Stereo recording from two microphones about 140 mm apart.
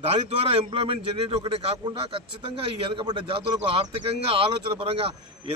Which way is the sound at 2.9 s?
35° right (ahead or behind).